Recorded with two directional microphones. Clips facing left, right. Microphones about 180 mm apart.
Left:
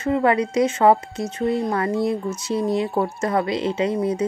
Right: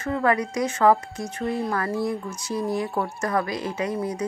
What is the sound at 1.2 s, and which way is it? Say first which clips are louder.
Speech: left 5 dB; centre (ahead or behind).